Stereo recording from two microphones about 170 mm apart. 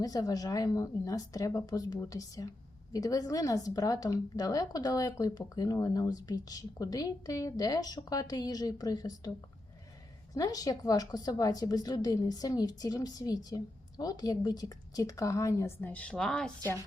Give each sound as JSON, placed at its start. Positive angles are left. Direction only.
{"t": 0.0, "sound": "a woman's voice", "side_deg": 20}
{"t": 10.3, "sound": "a woman's voice", "side_deg": 20}